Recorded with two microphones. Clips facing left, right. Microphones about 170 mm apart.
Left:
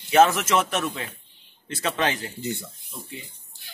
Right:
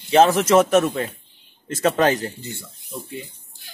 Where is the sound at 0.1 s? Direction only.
35° right (ahead or behind).